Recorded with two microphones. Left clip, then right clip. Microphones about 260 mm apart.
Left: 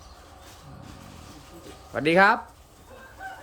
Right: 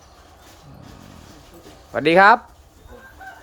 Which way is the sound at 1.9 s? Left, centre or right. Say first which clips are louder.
Right 7 dB; centre.